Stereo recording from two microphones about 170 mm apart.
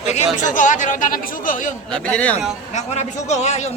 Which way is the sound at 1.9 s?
5° left (ahead or behind).